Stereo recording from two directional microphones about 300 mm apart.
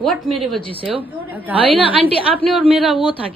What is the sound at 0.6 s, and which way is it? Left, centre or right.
Speech, centre.